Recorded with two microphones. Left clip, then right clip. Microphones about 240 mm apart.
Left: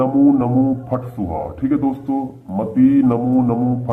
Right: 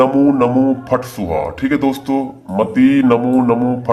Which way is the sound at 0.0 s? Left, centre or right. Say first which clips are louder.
Right 3 dB; right.